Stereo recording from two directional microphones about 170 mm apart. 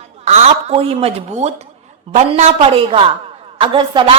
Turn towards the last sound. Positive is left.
turn(degrees=-30)  # may be behind; listen again after turning